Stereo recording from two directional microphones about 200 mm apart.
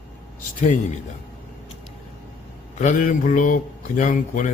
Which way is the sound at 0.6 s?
40° left (ahead or behind).